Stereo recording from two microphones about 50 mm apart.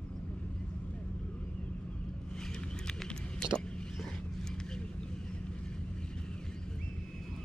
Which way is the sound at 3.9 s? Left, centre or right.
Centre.